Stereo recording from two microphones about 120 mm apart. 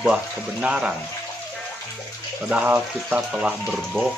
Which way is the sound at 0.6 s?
5° right (ahead or behind).